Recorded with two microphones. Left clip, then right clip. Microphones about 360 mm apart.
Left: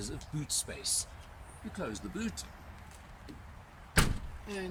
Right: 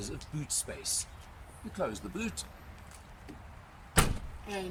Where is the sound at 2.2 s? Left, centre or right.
Centre.